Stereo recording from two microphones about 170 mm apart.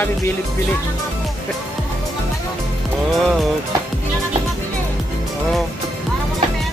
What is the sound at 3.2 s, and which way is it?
Music, centre (ahead or behind).